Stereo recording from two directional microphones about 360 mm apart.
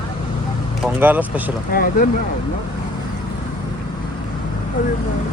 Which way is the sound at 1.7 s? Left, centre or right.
Left.